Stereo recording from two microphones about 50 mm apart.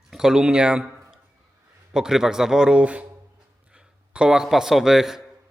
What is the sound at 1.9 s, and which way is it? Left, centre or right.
A man's voice, centre.